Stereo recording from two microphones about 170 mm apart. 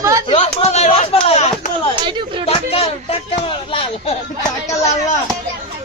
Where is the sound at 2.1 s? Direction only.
25° right (ahead or behind).